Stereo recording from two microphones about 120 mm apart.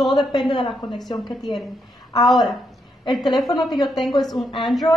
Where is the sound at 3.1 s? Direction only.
Centre (ahead or behind).